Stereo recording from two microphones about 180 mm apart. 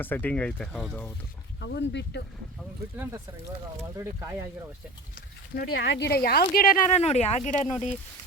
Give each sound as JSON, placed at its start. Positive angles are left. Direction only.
{"t": 0.0, "sound": "speech", "side_deg": 10}
{"t": 1.6, "sound": "speech", "side_deg": 75}
{"t": 3.9, "sound": "speech", "side_deg": -15}
{"t": 5.5, "sound": "speech", "side_deg": 60}
{"t": 6.9, "sound": "speech", "side_deg": 35}